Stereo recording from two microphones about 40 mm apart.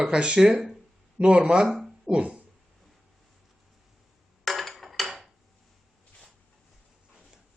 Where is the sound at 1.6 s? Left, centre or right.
Centre.